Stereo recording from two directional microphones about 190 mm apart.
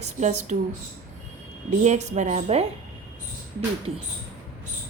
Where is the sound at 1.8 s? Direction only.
40° right (ahead or behind).